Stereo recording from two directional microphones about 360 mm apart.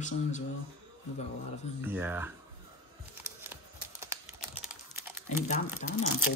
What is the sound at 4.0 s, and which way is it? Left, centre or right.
Typing, centre.